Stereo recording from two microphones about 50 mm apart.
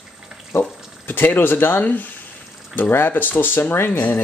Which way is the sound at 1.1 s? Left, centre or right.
Left.